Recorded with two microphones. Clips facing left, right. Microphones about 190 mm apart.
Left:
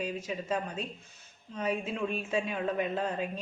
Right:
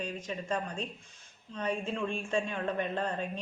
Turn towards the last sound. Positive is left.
turn(degrees=5)  # may be behind; listen again after turning